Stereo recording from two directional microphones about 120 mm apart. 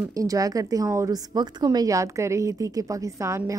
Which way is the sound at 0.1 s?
30° right (ahead or behind).